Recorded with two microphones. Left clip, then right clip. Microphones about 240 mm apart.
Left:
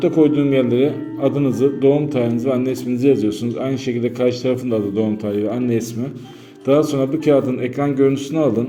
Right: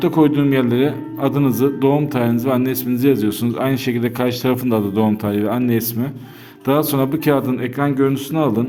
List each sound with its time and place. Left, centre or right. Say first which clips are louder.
0.0 s a man's voice: even; right